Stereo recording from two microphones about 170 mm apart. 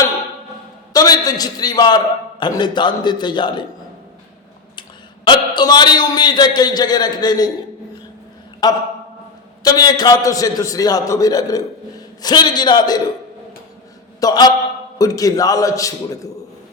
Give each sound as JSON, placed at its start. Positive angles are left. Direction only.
{"t": 0.9, "sound": "a man's voice", "side_deg": 20}
{"t": 4.8, "sound": "a man's voice", "side_deg": 25}
{"t": 8.6, "sound": "a man's voice", "side_deg": 20}
{"t": 14.2, "sound": "a man's voice", "side_deg": 25}